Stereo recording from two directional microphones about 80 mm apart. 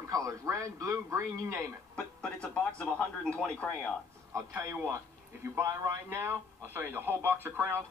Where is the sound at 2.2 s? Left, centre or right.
Centre.